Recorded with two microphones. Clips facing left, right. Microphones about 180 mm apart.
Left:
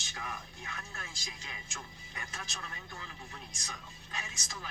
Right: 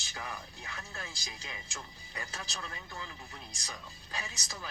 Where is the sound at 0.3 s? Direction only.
30° right (ahead or behind).